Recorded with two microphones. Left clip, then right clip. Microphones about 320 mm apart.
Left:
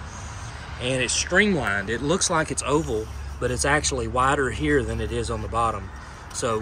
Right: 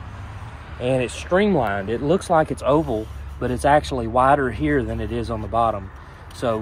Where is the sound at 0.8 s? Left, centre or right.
Centre.